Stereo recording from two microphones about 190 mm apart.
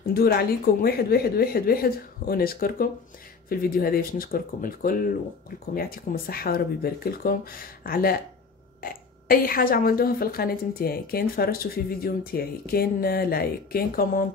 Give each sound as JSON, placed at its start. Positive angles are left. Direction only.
{"t": 0.1, "sound": "a woman's voice", "side_deg": 55}